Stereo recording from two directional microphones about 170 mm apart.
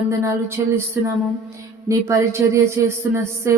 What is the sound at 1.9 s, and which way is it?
Speech, 20° right (ahead or behind).